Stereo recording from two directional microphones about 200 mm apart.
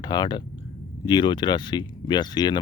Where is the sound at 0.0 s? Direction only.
20° left (ahead or behind).